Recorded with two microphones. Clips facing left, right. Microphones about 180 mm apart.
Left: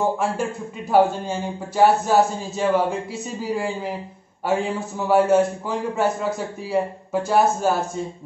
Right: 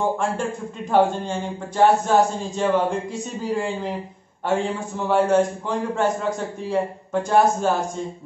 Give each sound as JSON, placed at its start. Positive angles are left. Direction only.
{"t": 0.8, "sound": "a man's voice", "side_deg": 5}